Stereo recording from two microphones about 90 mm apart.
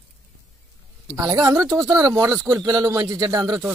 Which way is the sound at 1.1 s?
40° right (ahead or behind).